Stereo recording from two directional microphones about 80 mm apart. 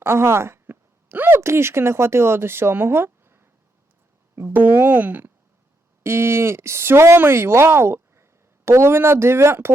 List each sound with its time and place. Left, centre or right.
0.0 s speech: right
6.0 s a woman's voice: right